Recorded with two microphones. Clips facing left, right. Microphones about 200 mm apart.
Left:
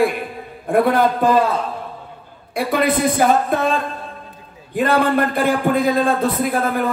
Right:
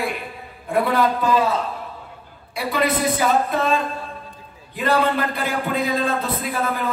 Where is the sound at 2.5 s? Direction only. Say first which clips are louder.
Left 4 dB; 50° left (ahead or behind).